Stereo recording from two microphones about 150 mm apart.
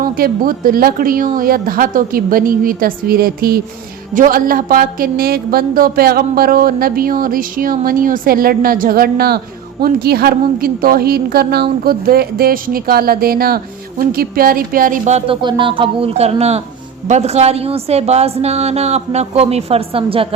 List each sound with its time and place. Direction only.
0.0 s a woman's voice: 70° right (ahead or behind); by 3.6 s 90° right
4.1 s a woman's voice: 65° right (ahead or behind); by 13.6 s 90° right
14.1 s a woman's voice: 80° right; by 15.2 s 55° right (ahead or behind)
15.3 s a woman's voice: 30° right (ahead or behind)